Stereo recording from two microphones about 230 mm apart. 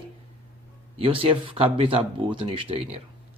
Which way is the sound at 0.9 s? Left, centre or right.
Right.